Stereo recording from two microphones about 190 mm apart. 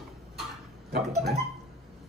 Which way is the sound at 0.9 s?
55° right (ahead or behind).